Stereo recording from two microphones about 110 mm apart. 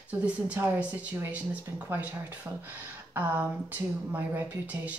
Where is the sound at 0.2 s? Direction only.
10° right (ahead or behind).